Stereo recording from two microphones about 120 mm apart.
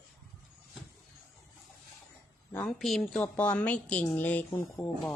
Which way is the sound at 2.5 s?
15° left (ahead or behind).